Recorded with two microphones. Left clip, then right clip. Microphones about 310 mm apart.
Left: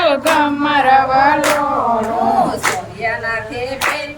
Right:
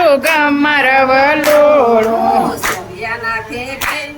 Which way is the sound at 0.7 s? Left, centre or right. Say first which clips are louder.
Left 1 dB; right.